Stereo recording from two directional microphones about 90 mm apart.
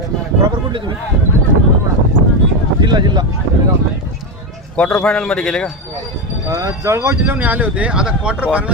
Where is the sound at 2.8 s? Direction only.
55° right (ahead or behind).